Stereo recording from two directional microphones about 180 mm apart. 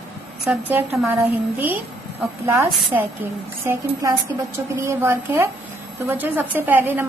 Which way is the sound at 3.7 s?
20° right (ahead or behind).